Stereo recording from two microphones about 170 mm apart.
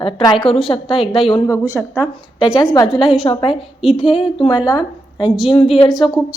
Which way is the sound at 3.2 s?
30° left (ahead or behind).